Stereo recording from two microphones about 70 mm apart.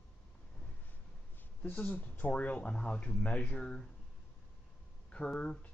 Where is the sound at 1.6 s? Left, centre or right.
Left.